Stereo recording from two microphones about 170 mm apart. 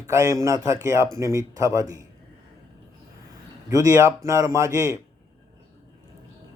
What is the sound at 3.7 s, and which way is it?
Speech, 20° right (ahead or behind).